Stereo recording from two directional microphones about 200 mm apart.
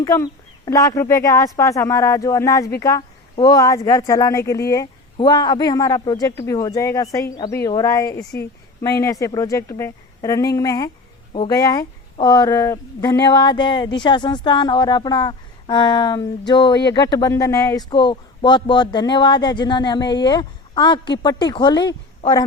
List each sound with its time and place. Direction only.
0.0 s a man's voice: 15° left (ahead or behind)
8.2 s a woman's voice: 5° left (ahead or behind)
8.8 s a man's voice: 15° left (ahead or behind)